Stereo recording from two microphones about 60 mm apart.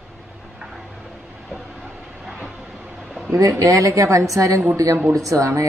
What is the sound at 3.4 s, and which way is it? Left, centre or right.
A woman's voice, right.